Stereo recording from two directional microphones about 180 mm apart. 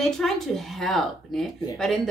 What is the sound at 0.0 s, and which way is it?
A woman's voice, centre (ahead or behind).